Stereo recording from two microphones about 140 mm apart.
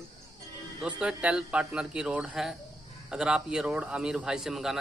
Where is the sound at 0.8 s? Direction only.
5° right (ahead or behind).